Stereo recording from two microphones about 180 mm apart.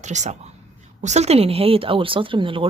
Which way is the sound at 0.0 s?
40° right (ahead or behind).